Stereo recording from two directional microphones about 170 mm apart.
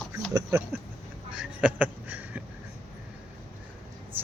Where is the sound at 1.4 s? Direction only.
10° right (ahead or behind).